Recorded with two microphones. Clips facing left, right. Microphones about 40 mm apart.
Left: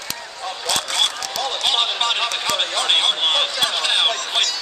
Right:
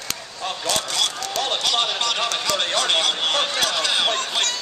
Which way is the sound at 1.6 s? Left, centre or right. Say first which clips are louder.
Left 6 dB; left.